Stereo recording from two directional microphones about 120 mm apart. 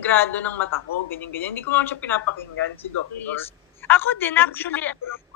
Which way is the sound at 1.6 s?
15° left (ahead or behind).